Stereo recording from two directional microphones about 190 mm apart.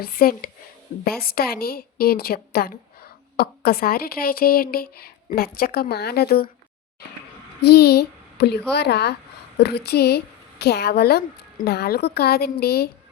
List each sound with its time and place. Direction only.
0.0 s a woman's voice: 50° left (ahead or behind)
7.6 s a woman's voice: 60° left (ahead or behind)